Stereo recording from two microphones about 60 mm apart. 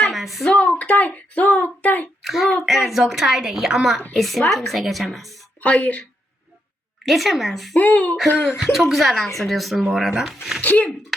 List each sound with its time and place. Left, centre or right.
0.1 s a sound: centre
0.4 s speech: left
2.2 s a woman's voice: centre
5.6 s speech: left
7.0 s a woman's voice: centre
7.8 s speech: left
8.4 s a woman's voice: centre
10.6 s speech: left